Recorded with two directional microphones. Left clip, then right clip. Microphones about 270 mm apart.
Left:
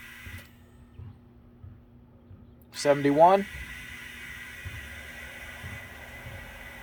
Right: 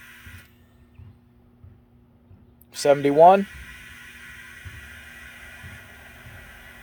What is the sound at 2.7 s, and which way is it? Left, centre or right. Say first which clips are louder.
Speech: right 5 dB; right.